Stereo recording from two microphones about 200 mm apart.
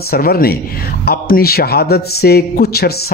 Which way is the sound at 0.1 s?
50° left (ahead or behind).